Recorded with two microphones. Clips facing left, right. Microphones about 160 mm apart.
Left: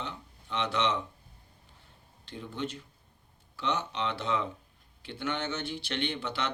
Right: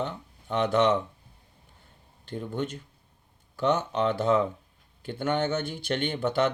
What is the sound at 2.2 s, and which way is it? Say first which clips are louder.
Speech: right 5 dB; 50° right (ahead or behind).